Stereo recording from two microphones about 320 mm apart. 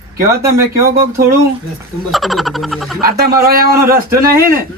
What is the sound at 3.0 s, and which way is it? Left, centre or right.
Speech, right.